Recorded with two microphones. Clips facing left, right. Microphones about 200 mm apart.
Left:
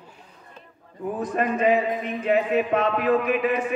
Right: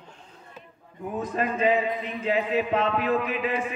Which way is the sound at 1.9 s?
50° left (ahead or behind).